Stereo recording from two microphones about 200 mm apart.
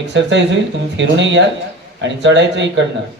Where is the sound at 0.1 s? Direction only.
65° right (ahead or behind).